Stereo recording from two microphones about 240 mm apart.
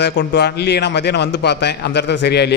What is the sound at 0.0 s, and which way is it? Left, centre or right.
A man's voice, left.